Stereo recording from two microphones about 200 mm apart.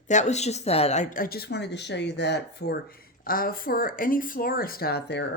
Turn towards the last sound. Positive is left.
turn(degrees=55)  # may be behind; listen again after turning